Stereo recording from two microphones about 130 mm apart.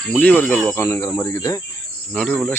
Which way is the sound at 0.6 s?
20° left (ahead or behind).